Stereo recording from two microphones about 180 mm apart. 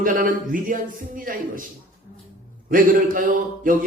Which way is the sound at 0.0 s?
50° right (ahead or behind).